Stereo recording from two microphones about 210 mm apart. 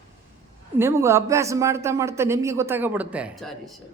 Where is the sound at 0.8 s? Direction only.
10° right (ahead or behind).